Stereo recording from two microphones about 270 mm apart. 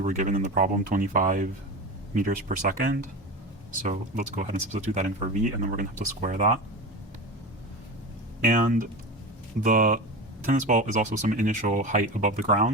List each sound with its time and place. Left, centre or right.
0.0 s speech: right
8.4 s speech: right